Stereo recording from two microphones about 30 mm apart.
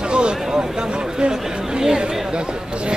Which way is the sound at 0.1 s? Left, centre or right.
Right.